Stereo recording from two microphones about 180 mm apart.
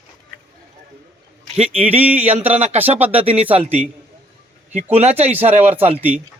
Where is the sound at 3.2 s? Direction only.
30° right (ahead or behind).